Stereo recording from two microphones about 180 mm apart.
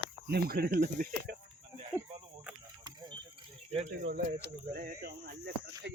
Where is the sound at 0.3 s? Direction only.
55° right (ahead or behind).